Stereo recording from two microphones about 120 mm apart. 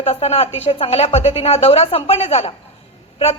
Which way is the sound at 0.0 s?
55° left (ahead or behind).